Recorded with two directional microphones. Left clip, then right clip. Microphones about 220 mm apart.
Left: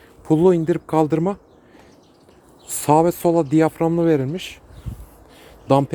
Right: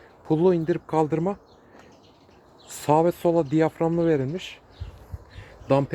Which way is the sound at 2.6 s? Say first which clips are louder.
Left 5 dB; 15° left (ahead or behind).